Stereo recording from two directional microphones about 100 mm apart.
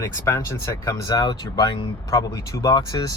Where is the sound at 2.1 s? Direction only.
30° left (ahead or behind).